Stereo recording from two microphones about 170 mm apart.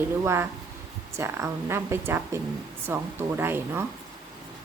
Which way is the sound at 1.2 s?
15° right (ahead or behind).